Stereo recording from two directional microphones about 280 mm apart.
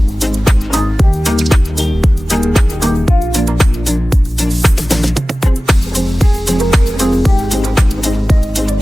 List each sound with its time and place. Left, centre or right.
0.2 s music: centre